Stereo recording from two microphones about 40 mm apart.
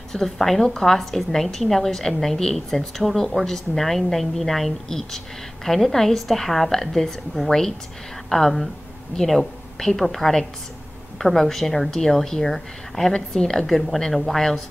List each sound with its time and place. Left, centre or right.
0.1 s a woman's voice: centre